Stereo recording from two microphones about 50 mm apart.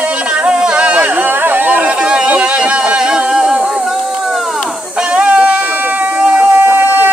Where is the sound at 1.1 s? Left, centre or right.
Right.